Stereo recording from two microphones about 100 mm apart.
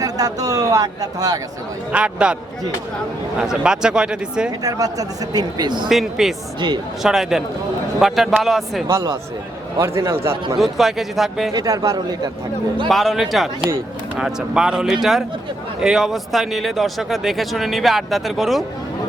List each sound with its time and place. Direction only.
0.0 s speech: 40° right (ahead or behind)
1.9 s speech: 10° right (ahead or behind)
3.4 s speech: 5° right (ahead or behind)
4.6 s speech: 35° right (ahead or behind)
5.9 s speech: centre (ahead or behind)
8.9 s a man's voice: 30° right (ahead or behind)
10.6 s speech: centre (ahead or behind)
11.5 s speech: 35° right (ahead or behind)
12.9 s speech: centre (ahead or behind)